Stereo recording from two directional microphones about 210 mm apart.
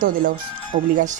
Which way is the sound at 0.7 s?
50° right (ahead or behind).